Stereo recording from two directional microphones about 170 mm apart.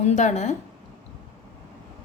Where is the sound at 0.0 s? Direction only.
45° left (ahead or behind).